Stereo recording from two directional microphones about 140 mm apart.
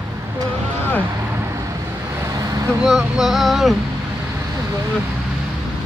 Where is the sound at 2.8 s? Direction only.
Centre (ahead or behind).